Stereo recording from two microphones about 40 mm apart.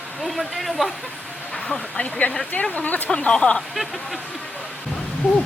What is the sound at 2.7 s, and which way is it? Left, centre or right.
Speech, left.